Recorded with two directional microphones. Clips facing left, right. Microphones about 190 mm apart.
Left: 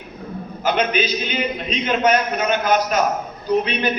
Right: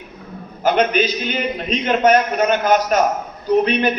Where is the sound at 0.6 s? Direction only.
50° right (ahead or behind).